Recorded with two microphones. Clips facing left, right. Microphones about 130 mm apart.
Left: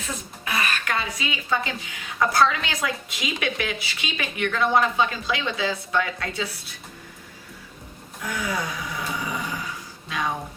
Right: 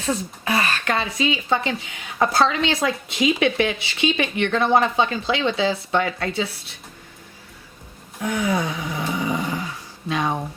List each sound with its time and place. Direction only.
0.0 s speech: 35° right (ahead or behind)
8.2 s a sound: 25° right (ahead or behind)
10.1 s speech: 30° right (ahead or behind)